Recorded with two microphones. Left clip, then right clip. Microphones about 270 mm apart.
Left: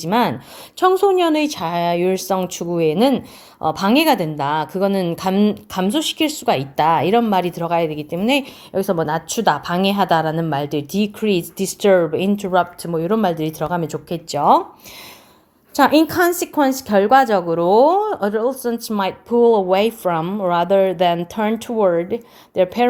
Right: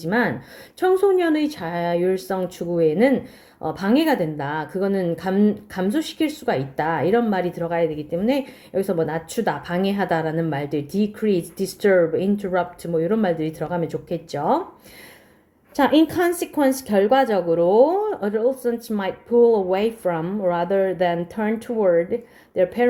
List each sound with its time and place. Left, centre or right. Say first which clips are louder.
0.0 s a woman's voice: left 4 dB; left
15.7 s a woman's voice: left 4 dB; left